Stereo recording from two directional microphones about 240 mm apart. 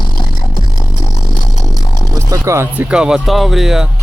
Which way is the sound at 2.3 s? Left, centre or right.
Centre.